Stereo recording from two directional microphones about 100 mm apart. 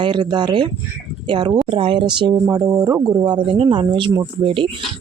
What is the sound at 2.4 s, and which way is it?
Speech, 35° right (ahead or behind).